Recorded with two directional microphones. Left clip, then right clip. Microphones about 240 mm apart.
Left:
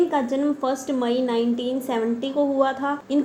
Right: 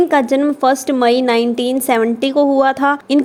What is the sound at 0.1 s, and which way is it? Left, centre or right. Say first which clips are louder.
A woman's voice: right 9 dB; right.